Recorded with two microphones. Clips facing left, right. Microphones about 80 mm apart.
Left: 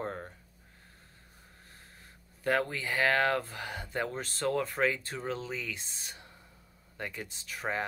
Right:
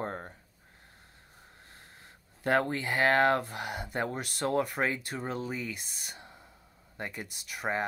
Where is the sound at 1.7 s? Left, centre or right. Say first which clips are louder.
Right 1 dB; right.